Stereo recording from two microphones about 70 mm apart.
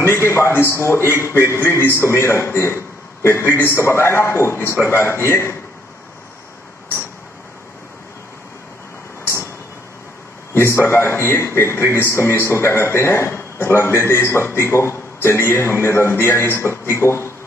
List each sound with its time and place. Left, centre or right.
0.0 s a man's voice: left
10.5 s a man's voice: left